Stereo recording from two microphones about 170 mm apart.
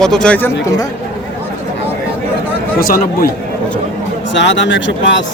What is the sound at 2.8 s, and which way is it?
Speech, 60° left (ahead or behind).